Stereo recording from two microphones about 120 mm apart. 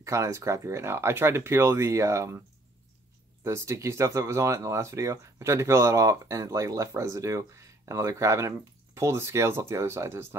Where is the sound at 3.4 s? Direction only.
25° right (ahead or behind).